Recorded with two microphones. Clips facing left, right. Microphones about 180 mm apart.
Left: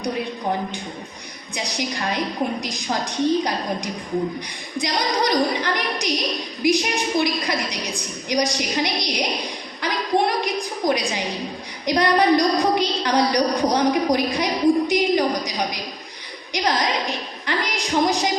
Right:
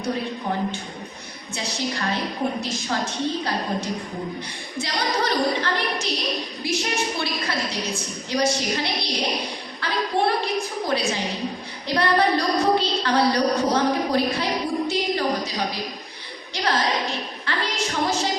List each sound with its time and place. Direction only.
1.5 s a woman's voice: 15° left (ahead or behind)